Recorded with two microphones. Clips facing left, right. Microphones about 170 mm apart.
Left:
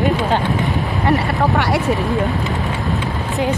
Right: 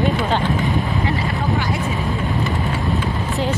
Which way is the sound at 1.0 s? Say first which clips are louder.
Left 5 dB; 75° left (ahead or behind).